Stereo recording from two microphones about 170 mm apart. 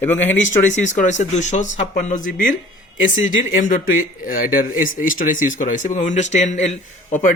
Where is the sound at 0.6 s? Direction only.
45° left (ahead or behind).